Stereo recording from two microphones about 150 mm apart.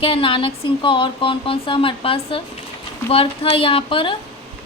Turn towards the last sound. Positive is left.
turn(degrees=35)  # may be behind; listen again after turning